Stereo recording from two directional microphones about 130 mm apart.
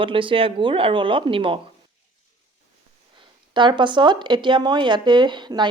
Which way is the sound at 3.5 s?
35° right (ahead or behind).